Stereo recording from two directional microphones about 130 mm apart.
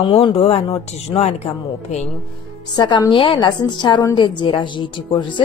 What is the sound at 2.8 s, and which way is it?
A woman's voice, 35° left (ahead or behind).